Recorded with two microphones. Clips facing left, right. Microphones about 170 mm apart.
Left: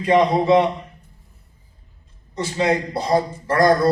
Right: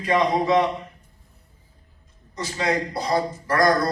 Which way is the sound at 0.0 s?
25° left (ahead or behind).